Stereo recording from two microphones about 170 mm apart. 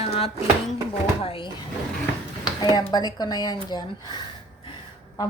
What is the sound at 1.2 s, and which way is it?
A woman's voice, 30° left (ahead or behind).